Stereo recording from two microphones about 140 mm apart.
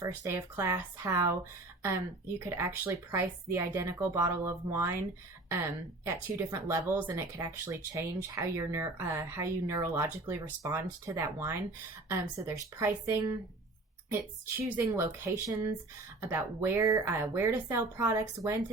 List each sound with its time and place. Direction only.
0.0 s speech: 20° right (ahead or behind)
14.1 s speech: 15° right (ahead or behind)